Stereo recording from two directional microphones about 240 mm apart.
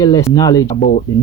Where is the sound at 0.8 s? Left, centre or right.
Left.